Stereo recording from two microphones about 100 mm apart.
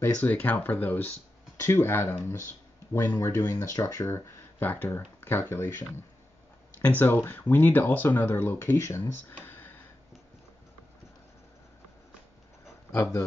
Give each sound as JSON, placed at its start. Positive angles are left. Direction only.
{"t": 0.0, "sound": "speech", "side_deg": 20}
{"t": 7.0, "sound": "speech", "side_deg": 20}